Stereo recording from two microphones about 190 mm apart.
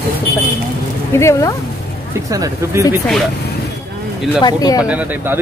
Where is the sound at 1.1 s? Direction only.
15° left (ahead or behind).